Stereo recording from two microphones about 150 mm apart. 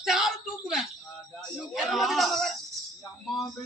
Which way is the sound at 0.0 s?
Centre (ahead or behind).